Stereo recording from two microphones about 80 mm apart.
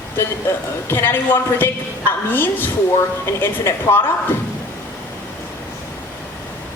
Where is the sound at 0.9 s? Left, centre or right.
Left.